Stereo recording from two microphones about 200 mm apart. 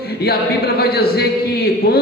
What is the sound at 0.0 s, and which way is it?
A man's voice, 50° left (ahead or behind).